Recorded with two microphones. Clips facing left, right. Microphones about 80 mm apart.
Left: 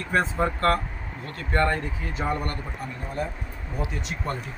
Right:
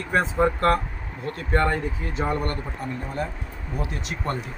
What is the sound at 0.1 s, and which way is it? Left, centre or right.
Speech, centre.